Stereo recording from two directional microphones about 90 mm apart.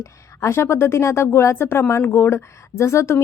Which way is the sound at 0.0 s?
30° left (ahead or behind).